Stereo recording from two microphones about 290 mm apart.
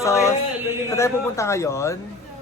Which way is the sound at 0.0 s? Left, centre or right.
Centre.